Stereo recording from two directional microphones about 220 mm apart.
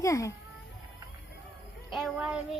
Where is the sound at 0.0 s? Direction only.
15° left (ahead or behind).